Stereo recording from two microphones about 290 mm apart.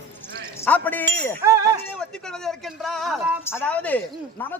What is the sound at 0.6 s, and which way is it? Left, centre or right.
A man's voice, centre.